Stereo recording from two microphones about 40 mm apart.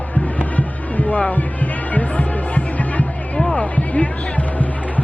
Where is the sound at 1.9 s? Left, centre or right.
Left.